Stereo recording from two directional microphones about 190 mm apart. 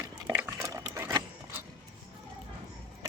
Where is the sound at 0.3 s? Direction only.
15° right (ahead or behind).